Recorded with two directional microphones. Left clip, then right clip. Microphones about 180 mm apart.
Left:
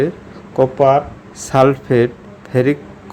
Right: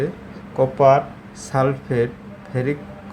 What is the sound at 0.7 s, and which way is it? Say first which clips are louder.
Speech: left 1 dB; 20° left (ahead or behind).